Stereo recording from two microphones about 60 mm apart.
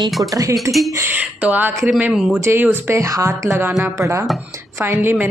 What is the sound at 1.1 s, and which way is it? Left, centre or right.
Speech, right.